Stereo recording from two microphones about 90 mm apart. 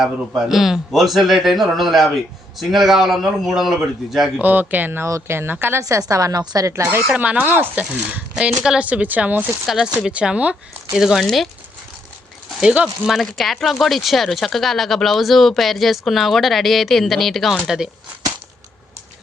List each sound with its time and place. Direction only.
0.0 s speech: 5° right (ahead or behind)
4.4 s speech: 20° right (ahead or behind)
5.8 s a woman's voice: 40° right (ahead or behind)
7.1 s speech: 15° right (ahead or behind)
9.6 s speech: 5° right (ahead or behind)
12.7 s speech: 5° right (ahead or behind)